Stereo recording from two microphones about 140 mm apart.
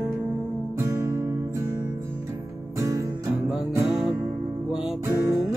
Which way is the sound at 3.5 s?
5° right (ahead or behind).